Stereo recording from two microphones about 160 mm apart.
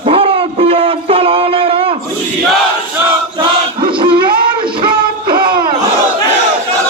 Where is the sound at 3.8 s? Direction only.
30° right (ahead or behind).